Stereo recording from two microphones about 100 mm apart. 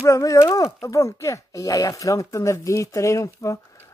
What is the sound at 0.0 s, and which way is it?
Speech, 35° left (ahead or behind).